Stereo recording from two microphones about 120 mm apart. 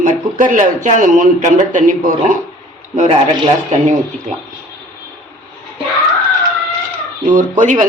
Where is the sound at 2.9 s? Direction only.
65° right (ahead or behind).